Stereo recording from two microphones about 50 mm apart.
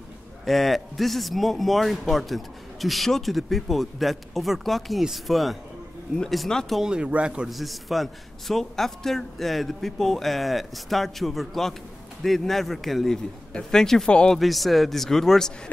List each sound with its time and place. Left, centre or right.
0.5 s a man's voice: centre
6.8 s a man's voice: centre
7.4 s a man's voice: centre